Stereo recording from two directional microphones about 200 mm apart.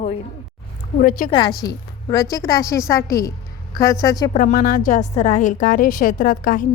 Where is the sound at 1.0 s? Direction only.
45° left (ahead or behind).